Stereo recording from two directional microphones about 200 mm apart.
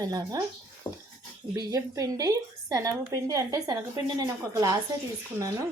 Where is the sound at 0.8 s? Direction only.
20° left (ahead or behind).